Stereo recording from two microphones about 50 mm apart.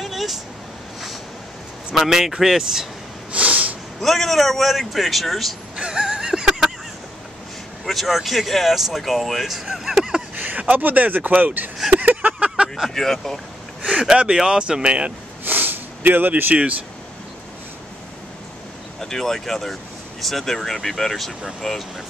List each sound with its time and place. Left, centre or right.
0.0 s vehicle: centre
2.0 s speech: centre
3.3 s snort: right
4.0 s speech: centre
5.8 s a sound: centre
7.8 s speech: centre
10.3 s speech: right
12.0 s a sound: right
12.6 s speech: centre
14.0 s speech: centre
15.4 s snort: right
18.9 s speech: centre